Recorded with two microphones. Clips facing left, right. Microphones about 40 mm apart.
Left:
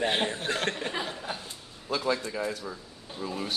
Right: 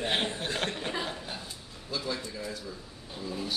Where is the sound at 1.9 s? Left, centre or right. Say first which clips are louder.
Left 6 dB; left.